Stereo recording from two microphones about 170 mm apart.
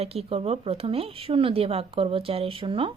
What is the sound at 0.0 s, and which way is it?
A woman's voice, 35° right (ahead or behind).